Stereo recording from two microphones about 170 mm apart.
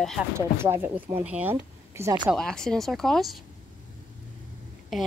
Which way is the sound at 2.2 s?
5° left (ahead or behind).